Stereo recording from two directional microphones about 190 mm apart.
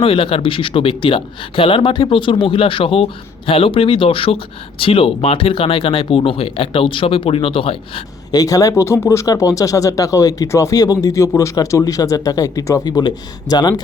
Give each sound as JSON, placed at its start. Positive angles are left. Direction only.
{"t": 0.0, "sound": "speech", "side_deg": 30}